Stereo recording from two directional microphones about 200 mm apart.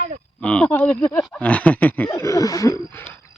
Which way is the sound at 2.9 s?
10° left (ahead or behind).